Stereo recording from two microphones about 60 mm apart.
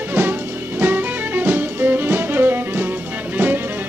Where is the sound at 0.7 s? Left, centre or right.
Right.